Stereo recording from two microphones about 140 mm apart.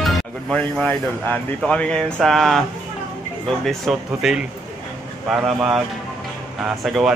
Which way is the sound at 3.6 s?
Centre (ahead or behind).